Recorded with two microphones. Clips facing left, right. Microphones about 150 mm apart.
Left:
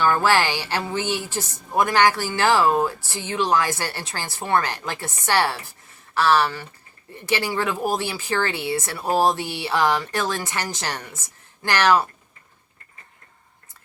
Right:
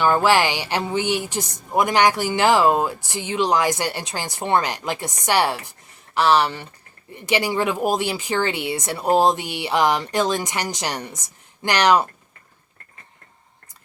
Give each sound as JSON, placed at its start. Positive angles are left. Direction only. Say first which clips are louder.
{"t": 0.0, "sound": "a woman's voice", "louder": "right 2 dB", "side_deg": -15}